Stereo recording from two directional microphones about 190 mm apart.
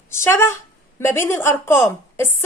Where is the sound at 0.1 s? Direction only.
15° left (ahead or behind).